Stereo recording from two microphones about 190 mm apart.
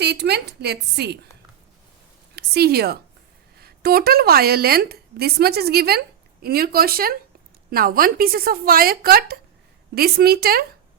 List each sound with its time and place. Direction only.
0.0 s a woman's voice: 60° right (ahead or behind)
2.3 s a woman's voice: 55° right (ahead or behind)